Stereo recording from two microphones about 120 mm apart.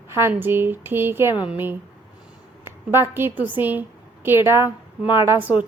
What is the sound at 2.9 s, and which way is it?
A woman's voice, 20° right (ahead or behind).